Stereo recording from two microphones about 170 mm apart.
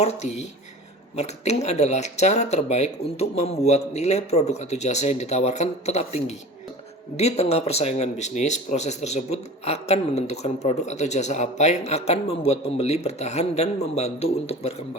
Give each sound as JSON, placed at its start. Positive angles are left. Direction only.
{"t": 0.0, "sound": "speech", "side_deg": 40}